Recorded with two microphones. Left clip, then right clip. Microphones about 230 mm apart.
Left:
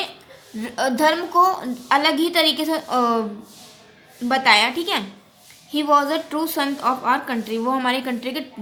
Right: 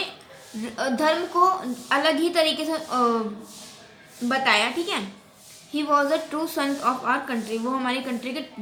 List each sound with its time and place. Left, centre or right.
0.6 s a woman's voice: left
4.3 s a woman's voice: left